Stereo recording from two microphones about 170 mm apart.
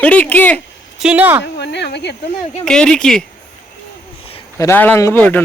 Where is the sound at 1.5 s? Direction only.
85° left.